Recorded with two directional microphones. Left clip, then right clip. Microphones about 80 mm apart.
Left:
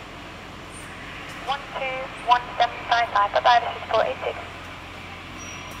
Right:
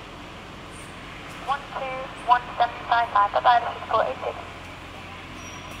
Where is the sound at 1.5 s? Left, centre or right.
Left.